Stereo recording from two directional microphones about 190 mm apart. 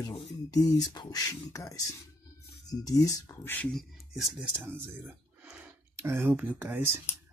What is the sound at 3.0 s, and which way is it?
Speech, 15° left (ahead or behind).